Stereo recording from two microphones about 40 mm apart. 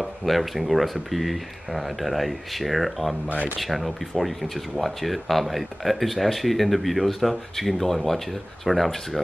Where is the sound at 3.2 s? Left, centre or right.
Right.